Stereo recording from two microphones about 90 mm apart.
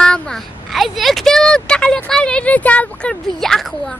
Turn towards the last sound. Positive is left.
turn(degrees=5)  # may be behind; listen again after turning